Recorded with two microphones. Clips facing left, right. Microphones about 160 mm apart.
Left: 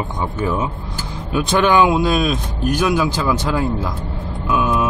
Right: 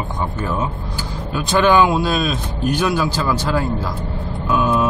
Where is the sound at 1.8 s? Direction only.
10° left (ahead or behind).